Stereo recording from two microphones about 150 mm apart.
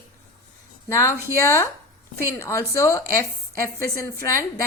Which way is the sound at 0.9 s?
20° left (ahead or behind).